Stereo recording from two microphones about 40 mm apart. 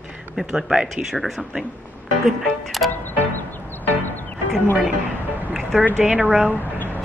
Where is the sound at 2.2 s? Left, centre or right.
Centre.